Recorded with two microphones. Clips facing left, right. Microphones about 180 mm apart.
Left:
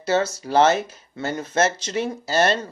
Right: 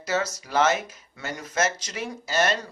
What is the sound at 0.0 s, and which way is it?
Speech, 30° left (ahead or behind).